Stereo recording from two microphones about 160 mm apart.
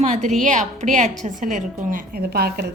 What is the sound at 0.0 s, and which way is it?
A woman's voice, 50° right (ahead or behind).